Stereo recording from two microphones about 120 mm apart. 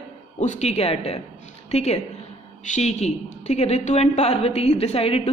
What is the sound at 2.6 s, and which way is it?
Speech, 80° left.